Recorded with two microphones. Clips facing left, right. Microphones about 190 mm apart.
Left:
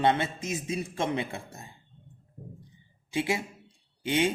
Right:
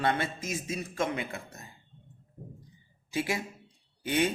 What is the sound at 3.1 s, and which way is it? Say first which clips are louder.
A man's voice: left 2 dB; 20° left (ahead or behind).